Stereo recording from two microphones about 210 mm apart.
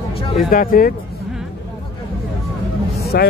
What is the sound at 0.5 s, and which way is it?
Speech, 45° left (ahead or behind).